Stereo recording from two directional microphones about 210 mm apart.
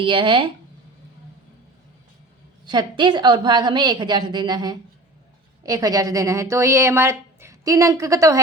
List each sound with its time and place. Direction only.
0.0 s a woman's voice: 25° right (ahead or behind)
2.6 s a woman's voice: 20° right (ahead or behind)